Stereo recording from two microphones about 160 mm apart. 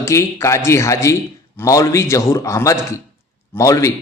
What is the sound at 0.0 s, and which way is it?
A man's voice, 15° left (ahead or behind).